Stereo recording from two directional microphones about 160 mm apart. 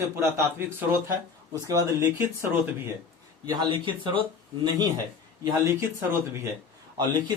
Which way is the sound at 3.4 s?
30° right (ahead or behind).